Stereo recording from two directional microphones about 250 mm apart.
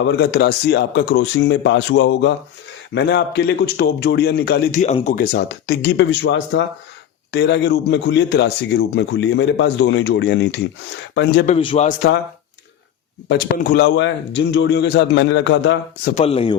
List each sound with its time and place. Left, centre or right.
0.0 s a man's voice: left
11.4 s a man's voice: left
13.2 s a man's voice: left
16.1 s a man's voice: left